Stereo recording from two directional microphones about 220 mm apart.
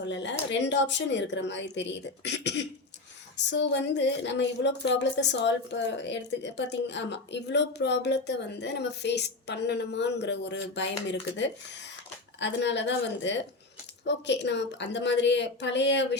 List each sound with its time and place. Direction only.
0.0 s speech: 55° left (ahead or behind)